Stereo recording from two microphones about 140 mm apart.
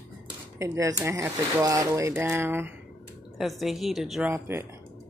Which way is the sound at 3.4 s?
Centre (ahead or behind).